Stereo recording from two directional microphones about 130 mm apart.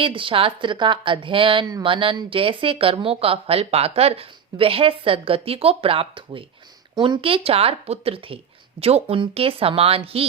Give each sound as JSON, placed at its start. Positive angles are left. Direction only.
{"t": 0.0, "sound": "a woman's voice", "side_deg": -40}
{"t": 6.9, "sound": "speech", "side_deg": -30}
{"t": 7.2, "sound": "a woman's voice", "side_deg": -45}